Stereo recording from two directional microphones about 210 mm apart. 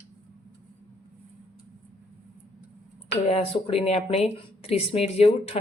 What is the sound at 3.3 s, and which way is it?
Speech, 30° left (ahead or behind).